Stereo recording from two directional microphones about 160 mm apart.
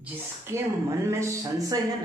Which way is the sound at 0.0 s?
15° right (ahead or behind).